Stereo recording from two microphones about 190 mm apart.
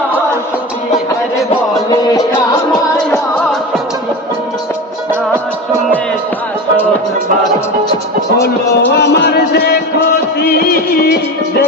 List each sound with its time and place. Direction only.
1.9 s music: 20° left (ahead or behind)
8.9 s music: 60° left (ahead or behind)